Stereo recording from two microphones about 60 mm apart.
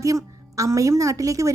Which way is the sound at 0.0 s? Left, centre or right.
Right.